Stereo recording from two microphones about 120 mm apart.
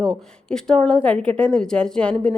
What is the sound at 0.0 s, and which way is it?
A woman's voice, 5° left (ahead or behind).